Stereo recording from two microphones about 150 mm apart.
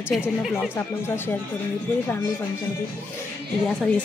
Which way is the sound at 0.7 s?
15° left (ahead or behind).